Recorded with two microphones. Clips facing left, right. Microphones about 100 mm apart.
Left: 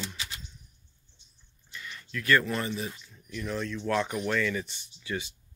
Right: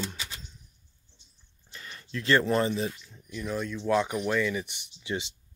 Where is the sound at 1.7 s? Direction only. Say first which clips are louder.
Right 1 dB; 35° right (ahead or behind).